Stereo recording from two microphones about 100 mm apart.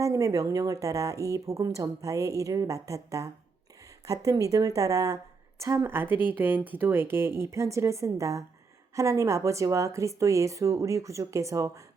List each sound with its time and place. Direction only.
0.0 s speech: 35° right (ahead or behind)